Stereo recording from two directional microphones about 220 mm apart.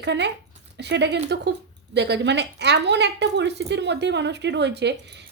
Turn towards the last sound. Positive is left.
turn(degrees=-50)  # may be behind; listen again after turning